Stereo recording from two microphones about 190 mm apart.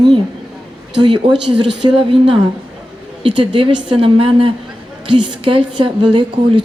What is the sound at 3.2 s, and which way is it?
Speech, 25° right (ahead or behind).